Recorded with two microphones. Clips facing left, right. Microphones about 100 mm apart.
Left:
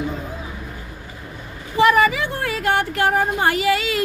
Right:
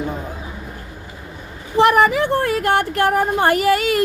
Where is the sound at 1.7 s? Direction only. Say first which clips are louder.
Right 2 dB; 60° right (ahead or behind).